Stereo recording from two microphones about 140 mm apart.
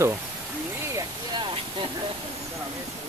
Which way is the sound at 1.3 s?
35° right (ahead or behind).